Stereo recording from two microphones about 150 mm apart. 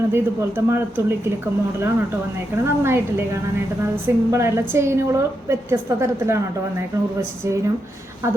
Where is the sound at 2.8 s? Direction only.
15° right (ahead or behind).